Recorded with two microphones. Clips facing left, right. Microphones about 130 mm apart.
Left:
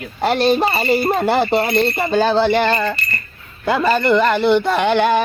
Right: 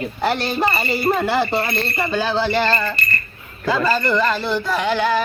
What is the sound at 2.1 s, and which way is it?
Speech, 55° left (ahead or behind).